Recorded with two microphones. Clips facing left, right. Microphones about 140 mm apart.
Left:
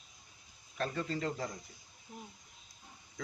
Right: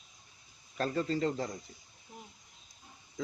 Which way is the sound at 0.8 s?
35° right (ahead or behind).